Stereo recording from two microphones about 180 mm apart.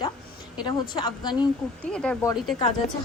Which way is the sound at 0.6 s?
25° left (ahead or behind).